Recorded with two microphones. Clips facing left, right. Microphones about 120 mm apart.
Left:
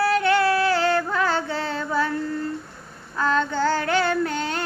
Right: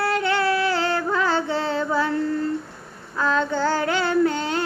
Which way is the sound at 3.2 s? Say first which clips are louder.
Even; 15° right (ahead or behind).